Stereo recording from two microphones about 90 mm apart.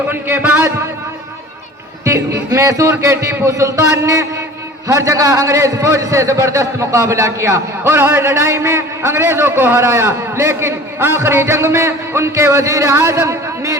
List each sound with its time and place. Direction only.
0.1 s a man's voice: 25° right (ahead or behind)
2.0 s a man's voice: 35° right (ahead or behind)